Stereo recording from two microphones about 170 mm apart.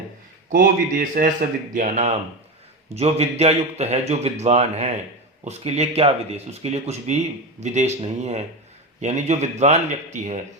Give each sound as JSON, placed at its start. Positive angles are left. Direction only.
{"t": 0.5, "sound": "speech", "side_deg": -55}
{"t": 1.7, "sound": "a man's voice", "side_deg": -45}